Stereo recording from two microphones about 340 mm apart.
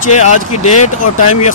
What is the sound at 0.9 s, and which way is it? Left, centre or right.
Speech, left.